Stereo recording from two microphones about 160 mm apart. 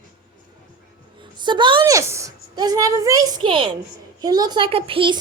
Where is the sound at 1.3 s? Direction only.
30° right (ahead or behind).